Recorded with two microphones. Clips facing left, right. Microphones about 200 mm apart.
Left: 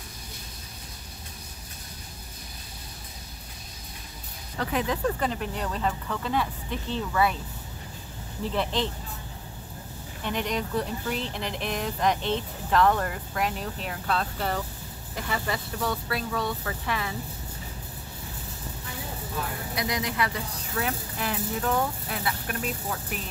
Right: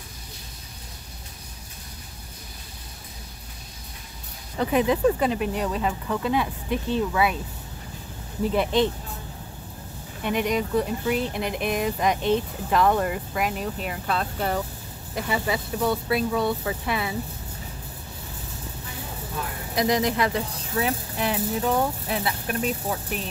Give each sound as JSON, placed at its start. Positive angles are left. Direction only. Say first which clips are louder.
{"t": 4.6, "sound": "speech", "louder": "right 6 dB", "side_deg": -15}
{"t": 8.5, "sound": "speech", "louder": "right 6 dB", "side_deg": -15}
{"t": 10.2, "sound": "speech", "louder": "right 5 dB", "side_deg": -10}
{"t": 19.8, "sound": "speech", "louder": "right 7 dB", "side_deg": -40}
{"t": 20.8, "sound": "speech", "louder": "right 5 dB", "side_deg": -20}